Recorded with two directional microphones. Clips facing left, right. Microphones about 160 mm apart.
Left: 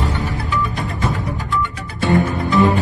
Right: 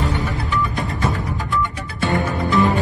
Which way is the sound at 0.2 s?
20° left (ahead or behind).